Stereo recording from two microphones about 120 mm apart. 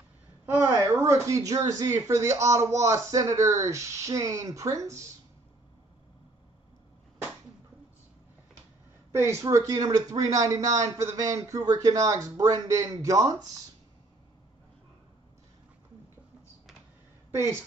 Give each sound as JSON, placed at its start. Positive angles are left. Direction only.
{"t": 0.8, "sound": "speech", "side_deg": -25}
{"t": 9.1, "sound": "speech", "side_deg": -25}